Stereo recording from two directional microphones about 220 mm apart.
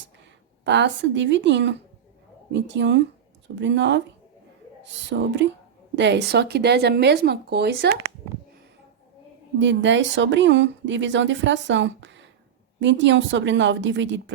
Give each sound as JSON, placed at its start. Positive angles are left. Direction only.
{"t": 0.6, "sound": "speech", "side_deg": -55}
{"t": 9.6, "sound": "speech", "side_deg": -55}